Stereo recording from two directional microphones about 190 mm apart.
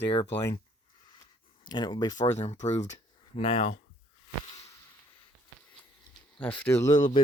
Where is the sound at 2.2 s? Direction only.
35° left (ahead or behind).